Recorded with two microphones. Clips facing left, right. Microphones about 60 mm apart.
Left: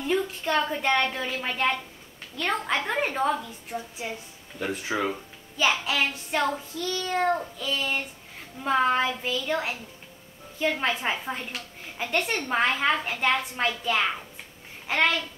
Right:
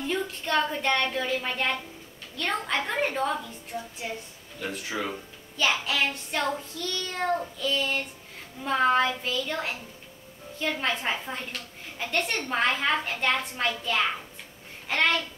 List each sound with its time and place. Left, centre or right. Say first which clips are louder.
0.0 s a woman's voice: left 3 dB; centre
4.6 s speech: left 4 dB; left
5.1 s music: even; centre
13.0 s a woman's voice: left 2 dB; centre
14.9 s music: left 1 dB; centre